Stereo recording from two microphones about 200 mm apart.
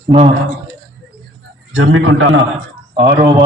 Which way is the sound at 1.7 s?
90° right.